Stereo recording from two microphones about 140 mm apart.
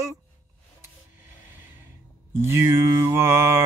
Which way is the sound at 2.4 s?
20° right (ahead or behind).